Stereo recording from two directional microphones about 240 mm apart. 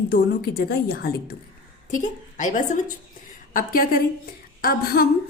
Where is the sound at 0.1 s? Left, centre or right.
Left.